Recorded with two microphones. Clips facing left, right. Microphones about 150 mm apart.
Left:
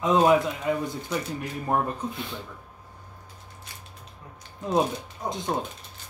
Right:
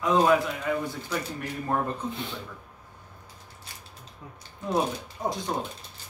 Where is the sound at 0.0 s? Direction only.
20° left (ahead or behind).